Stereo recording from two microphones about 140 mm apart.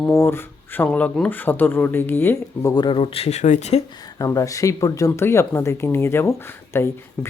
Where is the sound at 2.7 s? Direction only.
35° left (ahead or behind); by 3.8 s 55° left (ahead or behind).